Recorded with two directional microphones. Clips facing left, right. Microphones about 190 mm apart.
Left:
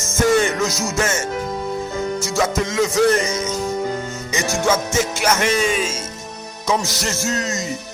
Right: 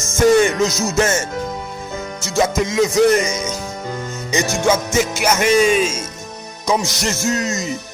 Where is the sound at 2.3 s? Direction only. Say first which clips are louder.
Right 4 dB; 15° right (ahead or behind).